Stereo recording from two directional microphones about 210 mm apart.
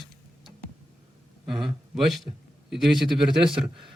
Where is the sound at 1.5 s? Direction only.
Centre (ahead or behind).